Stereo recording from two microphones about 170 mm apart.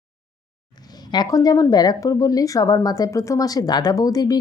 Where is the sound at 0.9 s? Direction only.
25° left (ahead or behind).